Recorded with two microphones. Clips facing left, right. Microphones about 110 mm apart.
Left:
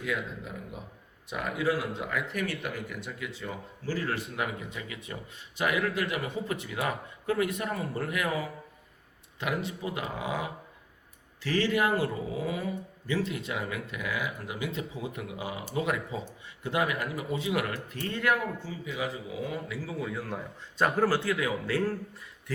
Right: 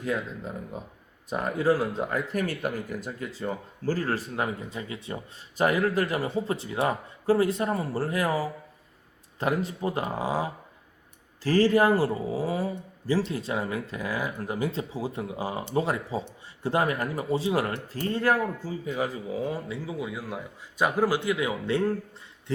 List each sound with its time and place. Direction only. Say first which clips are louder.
0.0 s speech: right 3 dB; 35° right (ahead or behind)